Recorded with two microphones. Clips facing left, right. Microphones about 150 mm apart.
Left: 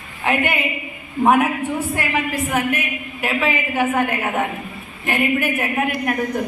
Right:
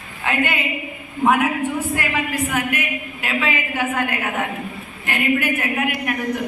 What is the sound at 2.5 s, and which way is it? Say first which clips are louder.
A woman's voice: left 2 dB; 25° left (ahead or behind).